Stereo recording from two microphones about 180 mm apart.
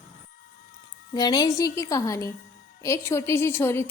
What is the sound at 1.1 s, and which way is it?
A woman's voice, 20° left (ahead or behind).